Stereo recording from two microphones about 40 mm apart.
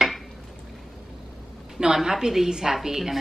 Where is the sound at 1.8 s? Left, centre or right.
Right.